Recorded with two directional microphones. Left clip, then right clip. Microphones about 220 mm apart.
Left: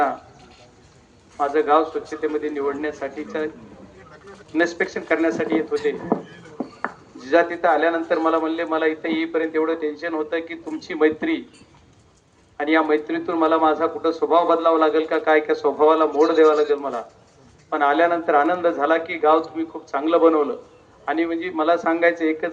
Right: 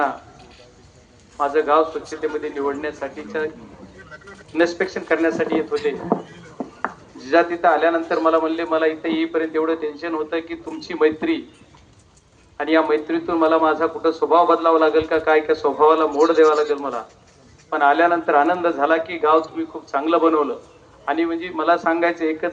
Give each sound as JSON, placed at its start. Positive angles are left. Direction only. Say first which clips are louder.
{"t": 1.4, "sound": "speech", "louder": "right 1 dB", "side_deg": 45}
{"t": 4.5, "sound": "speech", "louder": "right 2 dB", "side_deg": 45}
{"t": 12.5, "sound": "speech", "louder": "right 1 dB", "side_deg": 45}